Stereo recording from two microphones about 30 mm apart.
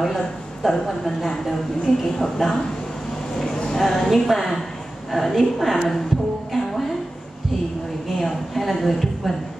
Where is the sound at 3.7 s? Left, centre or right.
Centre.